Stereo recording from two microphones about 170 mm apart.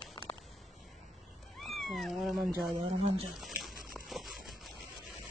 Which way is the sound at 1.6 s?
Centre (ahead or behind).